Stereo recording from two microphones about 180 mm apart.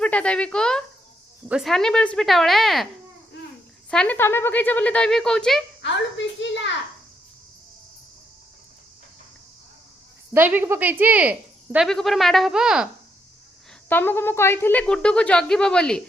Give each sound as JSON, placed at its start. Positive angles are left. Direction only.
{"t": 0.0, "sound": "speech", "side_deg": 5}
{"t": 5.8, "sound": "a woman's voice", "side_deg": 85}
{"t": 10.3, "sound": "speech", "side_deg": -10}
{"t": 13.8, "sound": "speech", "side_deg": 10}